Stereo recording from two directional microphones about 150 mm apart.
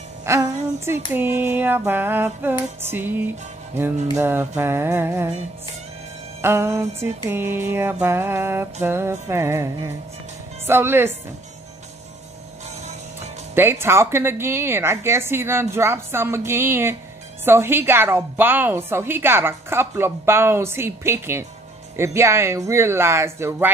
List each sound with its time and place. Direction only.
0.2 s a woman's voice: 20° right (ahead or behind)
6.4 s a woman's voice: 15° right (ahead or behind)
10.7 s a woman's voice: 15° right (ahead or behind)
13.6 s a woman's voice: 15° right (ahead or behind)